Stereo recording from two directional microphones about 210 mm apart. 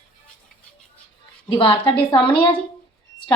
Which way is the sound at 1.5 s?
25° left (ahead or behind).